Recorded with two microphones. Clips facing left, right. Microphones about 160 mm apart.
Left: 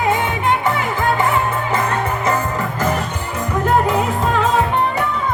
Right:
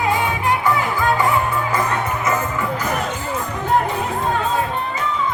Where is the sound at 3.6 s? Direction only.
90° left; by 5.1 s 70° left (ahead or behind).